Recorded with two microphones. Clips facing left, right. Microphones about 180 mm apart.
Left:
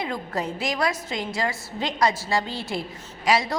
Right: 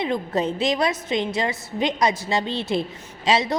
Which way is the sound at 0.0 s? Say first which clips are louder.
Right 5 dB; 20° right (ahead or behind).